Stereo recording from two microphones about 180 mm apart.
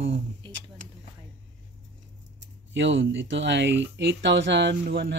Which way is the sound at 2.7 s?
90° right.